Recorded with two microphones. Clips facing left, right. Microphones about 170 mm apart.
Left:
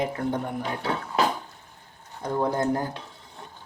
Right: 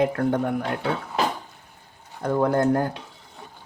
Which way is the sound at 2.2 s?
60° right (ahead or behind).